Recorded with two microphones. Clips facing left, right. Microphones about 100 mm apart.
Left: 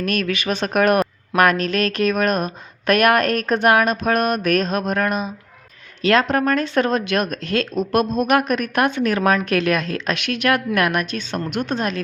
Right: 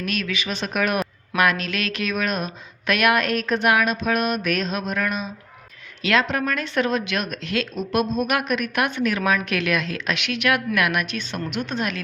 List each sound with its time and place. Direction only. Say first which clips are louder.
0.0 s a woman's voice: left 5 dB; 45° left (ahead or behind)